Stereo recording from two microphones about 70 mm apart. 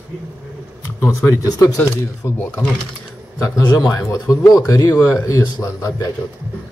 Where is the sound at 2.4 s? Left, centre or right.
Left.